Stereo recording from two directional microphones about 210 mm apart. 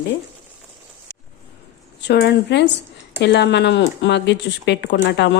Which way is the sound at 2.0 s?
50° left (ahead or behind).